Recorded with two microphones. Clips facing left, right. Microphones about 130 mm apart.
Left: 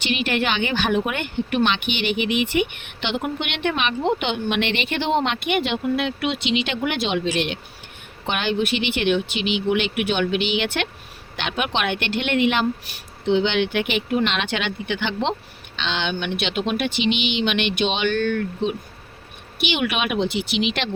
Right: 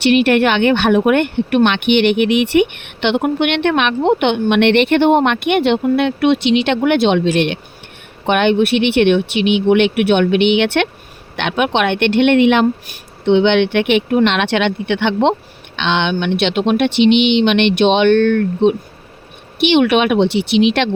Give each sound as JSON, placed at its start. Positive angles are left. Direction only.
{"t": 0.0, "sound": "speech", "side_deg": -60}